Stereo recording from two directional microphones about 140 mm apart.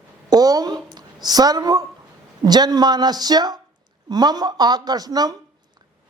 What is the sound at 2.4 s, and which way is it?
A woman's voice, 30° right (ahead or behind).